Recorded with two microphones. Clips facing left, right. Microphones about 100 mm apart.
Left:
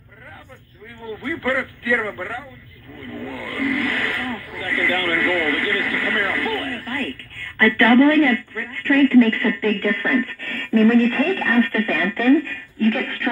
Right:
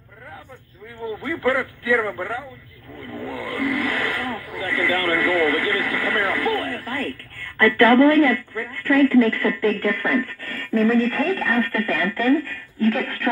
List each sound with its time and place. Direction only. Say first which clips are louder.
1.0 s a man's voice: right 2 dB; 20° right (ahead or behind)
3.0 s a sound: right 1 dB; 20° right (ahead or behind)
7.5 s speech: even; 25° right (ahead or behind); by 12.8 s 5° right (ahead or behind)
12.8 s a man's voice: left 1 dB; 25° right (ahead or behind)